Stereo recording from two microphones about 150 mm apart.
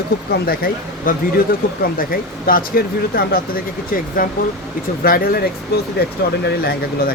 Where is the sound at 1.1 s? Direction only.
65° left (ahead or behind).